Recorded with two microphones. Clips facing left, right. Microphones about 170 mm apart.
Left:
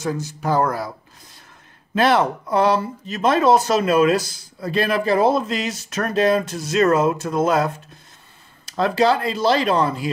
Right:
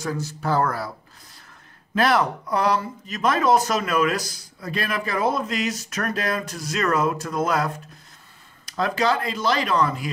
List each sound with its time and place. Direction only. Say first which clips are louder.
0.0 s speech: left 3 dB; 20° left (ahead or behind)
2.0 s speech: left 3 dB; 25° left (ahead or behind)